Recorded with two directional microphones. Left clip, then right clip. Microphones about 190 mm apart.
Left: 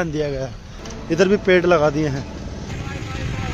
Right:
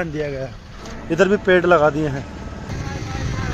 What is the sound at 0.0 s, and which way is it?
Speech, 10° left (ahead or behind).